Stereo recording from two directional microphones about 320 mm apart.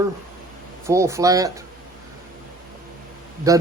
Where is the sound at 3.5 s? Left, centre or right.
Centre.